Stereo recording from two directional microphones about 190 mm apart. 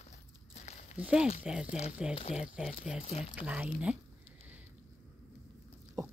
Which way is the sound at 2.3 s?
5° right (ahead or behind).